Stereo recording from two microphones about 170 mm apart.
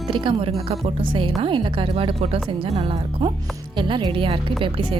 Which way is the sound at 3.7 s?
30° right (ahead or behind).